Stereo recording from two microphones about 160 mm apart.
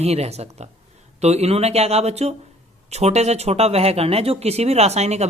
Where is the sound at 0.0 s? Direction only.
40° right (ahead or behind).